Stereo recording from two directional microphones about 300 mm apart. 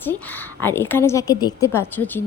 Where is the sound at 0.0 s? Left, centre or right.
Centre.